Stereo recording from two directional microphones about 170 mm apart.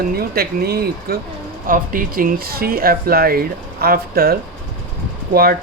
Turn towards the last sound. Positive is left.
turn(degrees=-60)  # may be behind; listen again after turning